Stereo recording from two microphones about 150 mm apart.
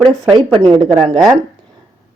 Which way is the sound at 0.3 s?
35° right (ahead or behind).